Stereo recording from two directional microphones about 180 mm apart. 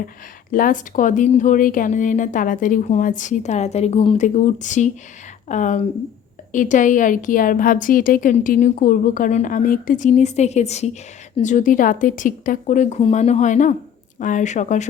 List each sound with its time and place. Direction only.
0.5 s a woman's voice: 50° left (ahead or behind)